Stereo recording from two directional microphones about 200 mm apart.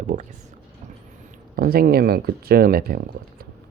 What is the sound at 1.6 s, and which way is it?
Speech, 50° right (ahead or behind).